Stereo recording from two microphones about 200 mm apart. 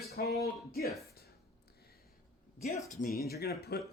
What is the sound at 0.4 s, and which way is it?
Speech, 50° left (ahead or behind).